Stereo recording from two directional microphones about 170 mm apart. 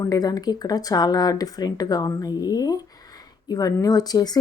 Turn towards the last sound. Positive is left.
turn(degrees=25)  # may be behind; listen again after turning